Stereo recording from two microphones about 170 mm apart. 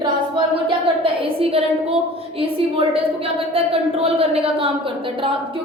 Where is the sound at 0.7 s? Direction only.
30° right (ahead or behind).